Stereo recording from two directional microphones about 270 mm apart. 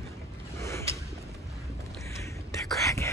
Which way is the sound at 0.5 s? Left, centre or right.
Centre.